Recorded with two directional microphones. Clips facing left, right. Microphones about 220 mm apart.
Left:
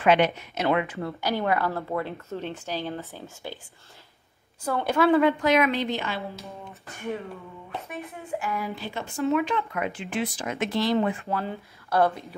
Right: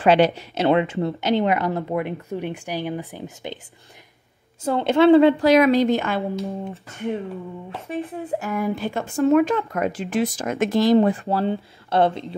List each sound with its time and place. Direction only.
0.0 s speech: 30° right (ahead or behind); by 3.5 s 15° right (ahead or behind)
4.6 s a woman's voice: 25° right (ahead or behind); by 6.2 s 50° right (ahead or behind)
7.7 s speech: 30° right (ahead or behind)
8.3 s speech: 45° right (ahead or behind); by 12.4 s 25° right (ahead or behind)